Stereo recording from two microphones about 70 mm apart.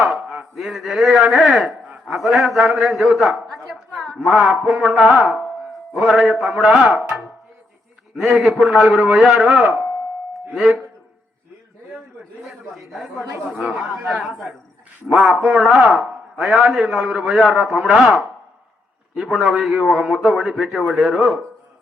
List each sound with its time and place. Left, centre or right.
0.0 s a sound: centre
0.3 s a man's voice: centre
8.1 s a man's voice: centre
12.9 s a man's voice: centre
13.5 s a man's voice: centre
15.1 s a man's voice: centre